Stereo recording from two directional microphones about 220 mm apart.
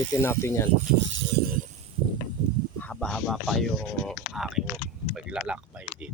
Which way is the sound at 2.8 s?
5° left (ahead or behind).